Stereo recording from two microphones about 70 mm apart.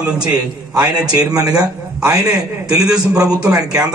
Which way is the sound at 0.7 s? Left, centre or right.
Right.